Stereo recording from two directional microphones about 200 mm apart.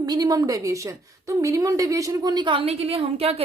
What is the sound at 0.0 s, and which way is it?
A woman's voice, 20° right (ahead or behind).